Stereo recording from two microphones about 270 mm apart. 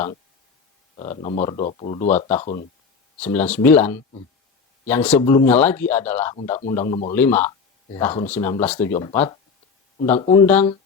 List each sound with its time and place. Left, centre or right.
0.9 s speech: left
3.3 s speech: centre
6.8 s speech: left
7.2 s speech: centre
10.4 s speech: centre